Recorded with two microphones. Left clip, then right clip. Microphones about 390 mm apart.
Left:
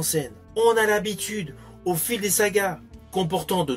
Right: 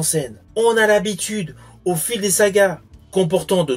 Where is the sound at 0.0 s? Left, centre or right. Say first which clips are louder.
Right 4 dB; left.